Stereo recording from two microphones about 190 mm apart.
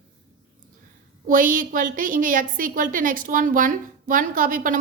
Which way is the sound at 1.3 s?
45° right (ahead or behind).